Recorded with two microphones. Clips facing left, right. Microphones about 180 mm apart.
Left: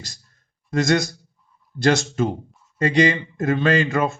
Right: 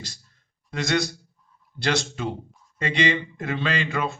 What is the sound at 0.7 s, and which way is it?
Speech, 45° left (ahead or behind).